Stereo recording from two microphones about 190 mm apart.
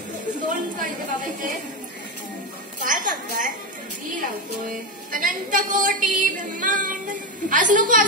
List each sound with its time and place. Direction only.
0.5 s a woman's voice: 45° right (ahead or behind)
2.8 s a sound: 45° right (ahead or behind)
4.6 s a woman's voice: 45° right (ahead or behind)